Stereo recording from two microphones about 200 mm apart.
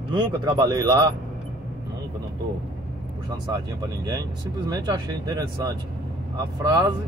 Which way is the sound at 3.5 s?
20° right (ahead or behind).